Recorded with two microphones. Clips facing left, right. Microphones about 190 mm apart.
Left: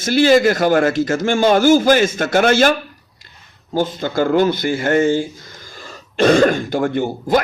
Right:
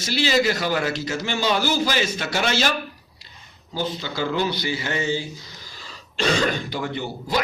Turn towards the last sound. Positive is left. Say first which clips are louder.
# left 8 dB
turn(degrees=50)  # may be behind; listen again after turning